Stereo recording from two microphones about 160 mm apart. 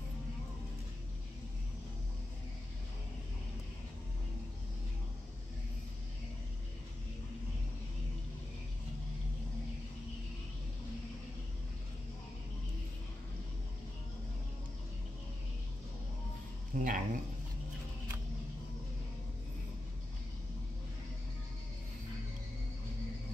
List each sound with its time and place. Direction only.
16.7 s speech: 55° right (ahead or behind)